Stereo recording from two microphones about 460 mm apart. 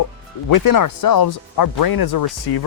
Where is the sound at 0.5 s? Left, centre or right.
Left.